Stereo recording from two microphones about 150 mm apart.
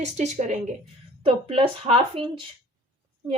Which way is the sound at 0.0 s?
50° right (ahead or behind).